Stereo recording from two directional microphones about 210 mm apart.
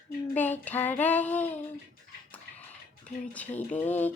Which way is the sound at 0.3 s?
10° left (ahead or behind).